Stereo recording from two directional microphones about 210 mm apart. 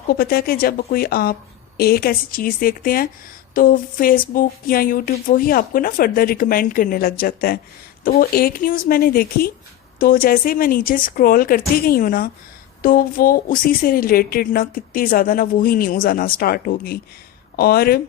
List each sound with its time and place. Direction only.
0.1 s a woman's voice: 45° left (ahead or behind)